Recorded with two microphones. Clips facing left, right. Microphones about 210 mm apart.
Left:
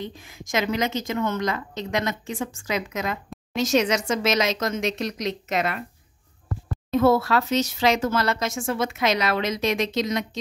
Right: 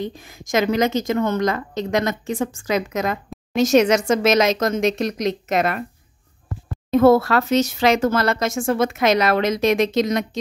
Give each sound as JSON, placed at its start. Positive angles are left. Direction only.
{"t": 0.0, "sound": "a woman's voice", "side_deg": -45}
{"t": 6.9, "sound": "a woman's voice", "side_deg": -55}